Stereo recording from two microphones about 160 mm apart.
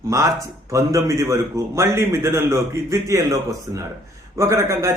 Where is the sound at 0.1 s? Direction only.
20° right (ahead or behind).